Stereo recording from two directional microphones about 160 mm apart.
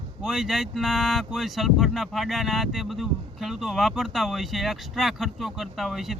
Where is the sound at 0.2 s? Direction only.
Centre (ahead or behind).